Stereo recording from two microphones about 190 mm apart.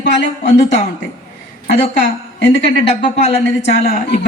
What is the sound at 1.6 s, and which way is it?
Speech, 65° left (ahead or behind).